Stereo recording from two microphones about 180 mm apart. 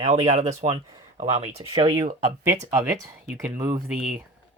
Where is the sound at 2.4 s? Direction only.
15° right (ahead or behind).